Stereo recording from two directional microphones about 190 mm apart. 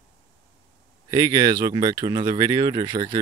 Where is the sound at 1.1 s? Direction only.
20° right (ahead or behind).